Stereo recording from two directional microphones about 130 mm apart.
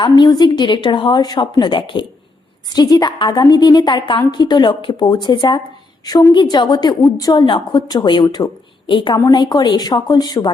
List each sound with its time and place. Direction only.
0.0 s a woman's voice: 35° left (ahead or behind)
9.1 s a woman's voice: 30° left (ahead or behind)